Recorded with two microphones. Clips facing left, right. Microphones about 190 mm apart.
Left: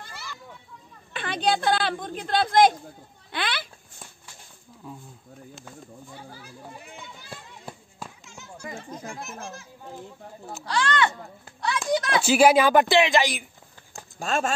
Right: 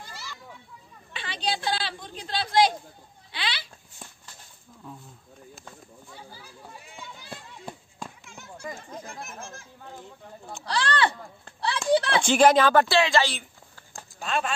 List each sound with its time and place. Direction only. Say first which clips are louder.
1.1 s speech: left 6 dB; 55° left (ahead or behind)
4.8 s speech: left 2 dB; 5° left (ahead or behind)
7.2 s a sound: right 2 dB; 5° left (ahead or behind)
9.4 s a child's voice: left 3 dB; 50° right (ahead or behind)
10.6 s speech: left 1 dB; 35° right (ahead or behind)
12.2 s speech: left 3 dB; 5° left (ahead or behind)
14.2 s speech: left 3 dB; 45° left (ahead or behind)